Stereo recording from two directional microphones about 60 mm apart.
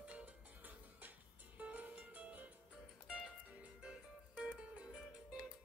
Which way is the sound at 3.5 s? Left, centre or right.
Centre.